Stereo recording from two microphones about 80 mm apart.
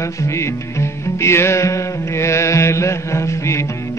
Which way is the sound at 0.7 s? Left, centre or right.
Left.